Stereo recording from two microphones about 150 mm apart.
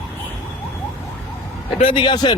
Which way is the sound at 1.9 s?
35° left (ahead or behind).